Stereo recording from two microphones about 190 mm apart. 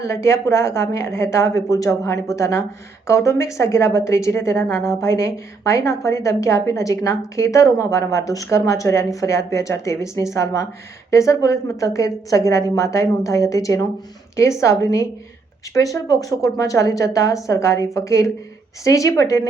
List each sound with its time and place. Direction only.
0.0 s a woman's voice: 15° left (ahead or behind)